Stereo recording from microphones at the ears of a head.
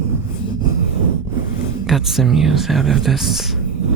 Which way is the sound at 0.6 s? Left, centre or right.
Right.